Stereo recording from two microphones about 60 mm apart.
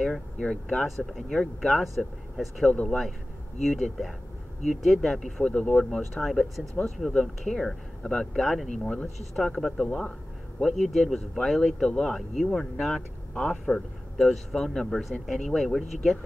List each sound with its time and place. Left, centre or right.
0.0 s speech: centre
0.8 s speech: centre
2.7 s speech: left
3.6 s speech: centre
5.4 s speech: centre
6.2 s speech: centre
13.3 s speech: centre
14.1 s speech: centre